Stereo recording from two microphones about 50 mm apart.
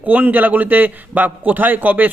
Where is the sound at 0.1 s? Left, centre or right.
Right.